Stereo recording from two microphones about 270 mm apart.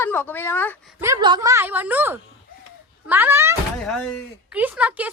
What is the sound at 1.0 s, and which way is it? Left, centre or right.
Speech, centre.